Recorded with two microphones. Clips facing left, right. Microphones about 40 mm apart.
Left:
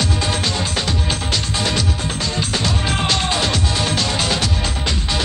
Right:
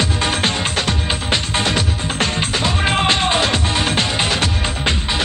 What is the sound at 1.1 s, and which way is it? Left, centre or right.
Music, right.